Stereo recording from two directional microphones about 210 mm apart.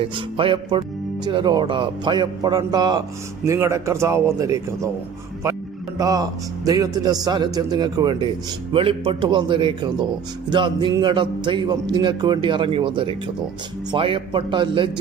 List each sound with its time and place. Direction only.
0.0 s a man's voice: 25° right (ahead or behind)
6.0 s a man's voice: 15° right (ahead or behind)